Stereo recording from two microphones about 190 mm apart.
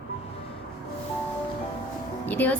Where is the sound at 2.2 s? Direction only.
10° left (ahead or behind).